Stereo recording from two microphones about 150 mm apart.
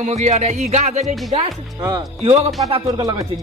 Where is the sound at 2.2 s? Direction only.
45° right (ahead or behind).